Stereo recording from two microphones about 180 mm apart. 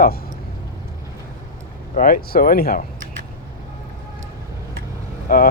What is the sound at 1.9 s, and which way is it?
Speech, 50° left (ahead or behind).